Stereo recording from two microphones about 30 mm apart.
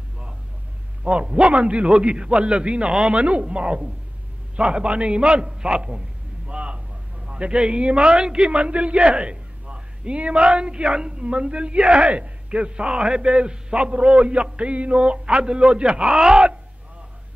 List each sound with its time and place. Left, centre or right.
1.0 s a man's voice: right
8.5 s a man's voice: right